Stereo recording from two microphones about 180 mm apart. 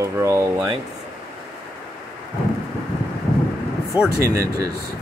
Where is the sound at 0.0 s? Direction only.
15° right (ahead or behind).